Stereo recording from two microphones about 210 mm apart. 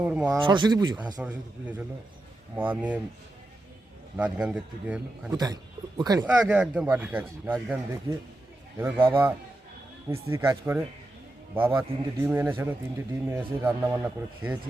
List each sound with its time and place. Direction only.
0.0 s speech: 5° right (ahead or behind)
0.4 s speech: 20° right (ahead or behind)
1.2 s speech: 5° right (ahead or behind)
4.2 s speech: 5° right (ahead or behind)
6.0 s speech: 15° right (ahead or behind)
6.4 s speech: 5° right (ahead or behind)
8.8 s speech: 10° right (ahead or behind)